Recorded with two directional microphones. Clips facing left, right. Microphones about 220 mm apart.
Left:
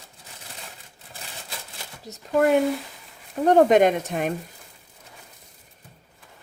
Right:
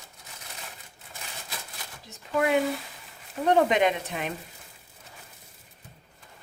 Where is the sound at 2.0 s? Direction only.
40° left (ahead or behind).